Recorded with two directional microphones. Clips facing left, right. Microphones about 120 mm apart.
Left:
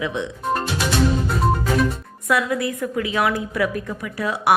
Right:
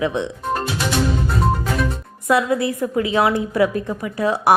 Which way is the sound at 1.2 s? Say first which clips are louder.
Even; centre (ahead or behind).